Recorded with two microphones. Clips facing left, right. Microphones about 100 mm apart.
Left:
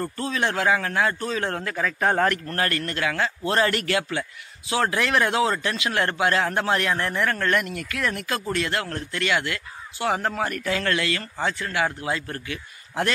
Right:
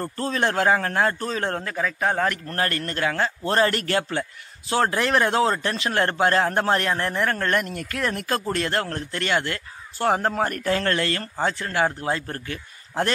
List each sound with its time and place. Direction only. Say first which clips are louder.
0.0 s a man's voice: right 1 dB; 35° right (ahead or behind)
1.8 s a man's voice: left 2 dB; 5° right (ahead or behind)
2.3 s a man's voice: even; 25° right (ahead or behind)